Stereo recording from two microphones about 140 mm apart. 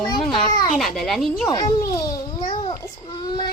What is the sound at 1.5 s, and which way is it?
Babbling, 25° left (ahead or behind).